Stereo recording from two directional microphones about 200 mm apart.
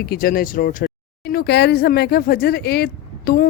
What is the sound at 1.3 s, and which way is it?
Speech, 55° left (ahead or behind).